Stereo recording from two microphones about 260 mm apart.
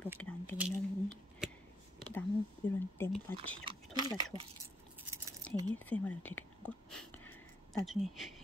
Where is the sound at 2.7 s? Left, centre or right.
Centre.